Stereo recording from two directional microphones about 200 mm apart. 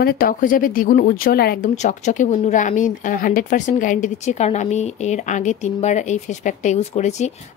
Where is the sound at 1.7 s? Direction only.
35° left (ahead or behind).